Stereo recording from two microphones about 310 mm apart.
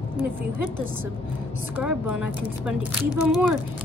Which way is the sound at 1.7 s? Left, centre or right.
Centre.